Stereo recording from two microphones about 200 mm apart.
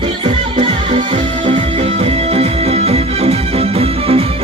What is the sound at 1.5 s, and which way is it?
Music, 30° right (ahead or behind).